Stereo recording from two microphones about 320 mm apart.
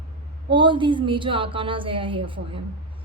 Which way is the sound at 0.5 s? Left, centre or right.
Centre.